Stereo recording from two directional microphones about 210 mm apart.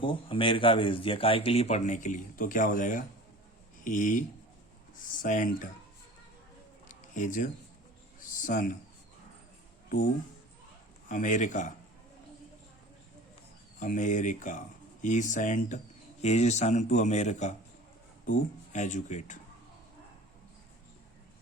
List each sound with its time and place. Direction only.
0.0 s a man's voice: 25° left (ahead or behind)
5.2 s a man's voice: 40° left (ahead or behind)
6.8 s a sound: 35° left (ahead or behind)
11.1 s a man's voice: 40° left (ahead or behind)
13.7 s a man's voice: 40° left (ahead or behind)